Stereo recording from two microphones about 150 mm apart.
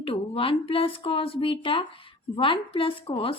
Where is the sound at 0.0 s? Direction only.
40° left (ahead or behind).